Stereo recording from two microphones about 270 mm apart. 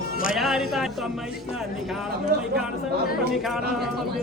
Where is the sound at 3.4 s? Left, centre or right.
Centre.